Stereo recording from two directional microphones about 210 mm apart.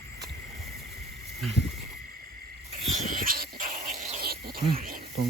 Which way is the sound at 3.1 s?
40° right (ahead or behind).